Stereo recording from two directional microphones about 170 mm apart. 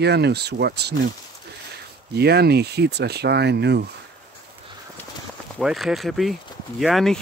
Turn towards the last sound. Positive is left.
turn(degrees=0)  # may be behind; listen again after turning